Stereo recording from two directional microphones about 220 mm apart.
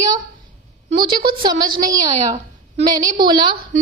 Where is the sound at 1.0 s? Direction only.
20° right (ahead or behind).